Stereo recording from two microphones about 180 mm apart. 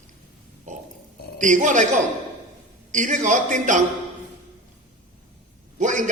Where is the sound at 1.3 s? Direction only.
45° right (ahead or behind).